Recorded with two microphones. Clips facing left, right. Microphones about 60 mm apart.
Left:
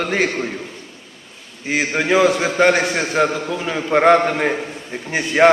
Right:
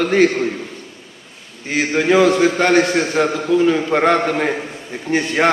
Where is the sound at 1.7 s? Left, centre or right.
Centre.